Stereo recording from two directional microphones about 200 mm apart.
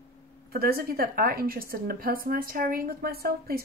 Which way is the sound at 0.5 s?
50° right (ahead or behind).